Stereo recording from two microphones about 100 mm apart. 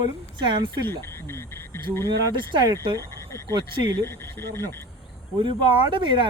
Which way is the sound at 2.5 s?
45° right (ahead or behind).